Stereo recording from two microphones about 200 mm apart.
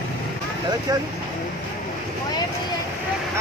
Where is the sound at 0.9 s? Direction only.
20° right (ahead or behind).